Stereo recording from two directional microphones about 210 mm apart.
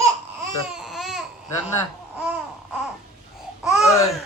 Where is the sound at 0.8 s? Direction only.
Centre (ahead or behind).